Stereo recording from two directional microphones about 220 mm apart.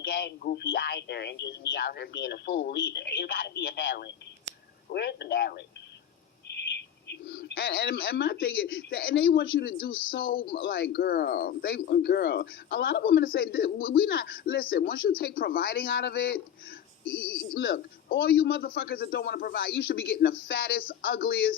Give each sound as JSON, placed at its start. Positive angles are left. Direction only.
{"t": 0.0, "sound": "speech", "side_deg": 45}
{"t": 17.1, "sound": "speech", "side_deg": 5}
{"t": 17.5, "sound": "speech", "side_deg": 45}